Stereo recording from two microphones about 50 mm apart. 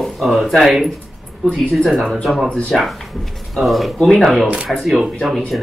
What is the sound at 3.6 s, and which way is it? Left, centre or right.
Speech, centre.